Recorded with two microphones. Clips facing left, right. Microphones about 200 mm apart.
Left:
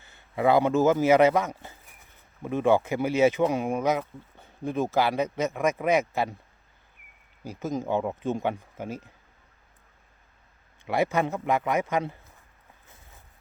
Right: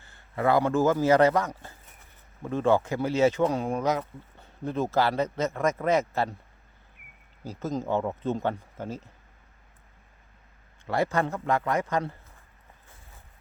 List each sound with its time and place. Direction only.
0.0 s a man's voice: 20° left (ahead or behind)
7.4 s speech: 15° left (ahead or behind)
10.8 s a man's voice: 20° left (ahead or behind)